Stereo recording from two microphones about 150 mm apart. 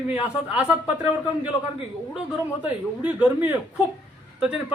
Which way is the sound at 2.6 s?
10° right (ahead or behind).